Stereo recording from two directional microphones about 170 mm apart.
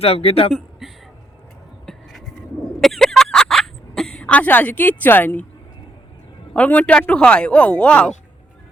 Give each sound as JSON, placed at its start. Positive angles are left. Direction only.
{"t": 0.0, "sound": "speech", "side_deg": 35}
{"t": 0.8, "sound": "a sound", "side_deg": 0}
{"t": 6.5, "sound": "speech", "side_deg": 10}